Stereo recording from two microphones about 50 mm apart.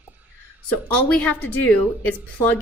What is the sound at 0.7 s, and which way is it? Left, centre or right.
A woman's voice, left.